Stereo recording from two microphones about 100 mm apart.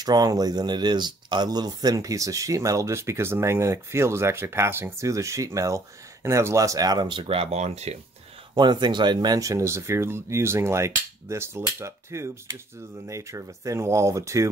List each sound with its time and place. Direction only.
0.0 s speech: 40° right (ahead or behind); by 8.0 s 90° right
8.5 s speech: 50° right (ahead or behind); by 14.5 s 30° right (ahead or behind)